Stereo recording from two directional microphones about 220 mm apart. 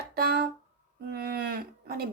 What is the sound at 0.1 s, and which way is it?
Music, 45° right (ahead or behind).